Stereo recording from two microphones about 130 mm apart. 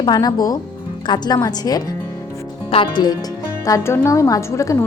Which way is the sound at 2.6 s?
45° left (ahead or behind).